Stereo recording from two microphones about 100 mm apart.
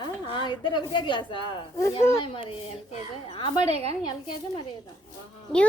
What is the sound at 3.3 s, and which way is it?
Speech, 60° left (ahead or behind).